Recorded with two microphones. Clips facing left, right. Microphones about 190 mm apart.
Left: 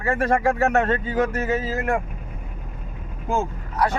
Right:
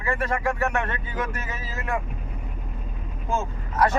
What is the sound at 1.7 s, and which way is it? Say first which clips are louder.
Speech: left 6 dB; 60° left (ahead or behind).